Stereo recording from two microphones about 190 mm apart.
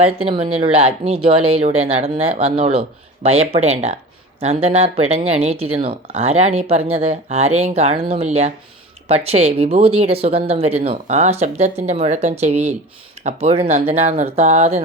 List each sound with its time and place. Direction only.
0.0 s speech: 30° right (ahead or behind)